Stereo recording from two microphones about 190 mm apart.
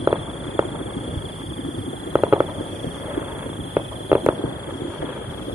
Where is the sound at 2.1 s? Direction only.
10° right (ahead or behind).